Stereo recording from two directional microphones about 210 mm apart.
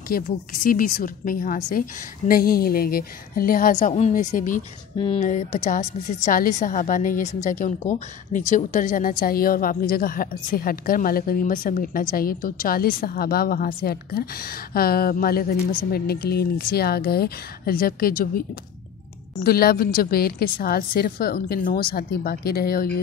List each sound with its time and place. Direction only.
0.1 s a woman's voice: 40° left (ahead or behind)
19.4 s a woman's voice: 45° left (ahead or behind)